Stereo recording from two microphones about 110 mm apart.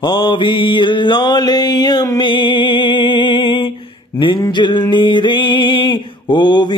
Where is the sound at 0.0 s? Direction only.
45° left (ahead or behind).